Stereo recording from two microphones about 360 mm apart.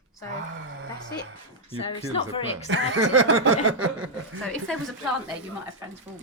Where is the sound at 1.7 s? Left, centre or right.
Centre.